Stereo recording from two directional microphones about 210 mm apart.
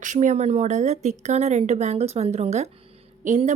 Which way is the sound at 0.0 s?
35° right (ahead or behind).